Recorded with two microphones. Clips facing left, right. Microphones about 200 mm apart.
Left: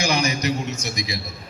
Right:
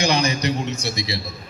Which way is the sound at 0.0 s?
35° right (ahead or behind).